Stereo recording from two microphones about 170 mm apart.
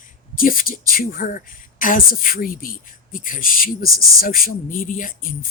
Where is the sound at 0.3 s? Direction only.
55° left (ahead or behind).